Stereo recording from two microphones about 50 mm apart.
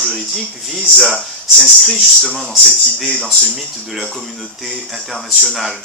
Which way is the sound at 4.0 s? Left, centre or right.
Centre.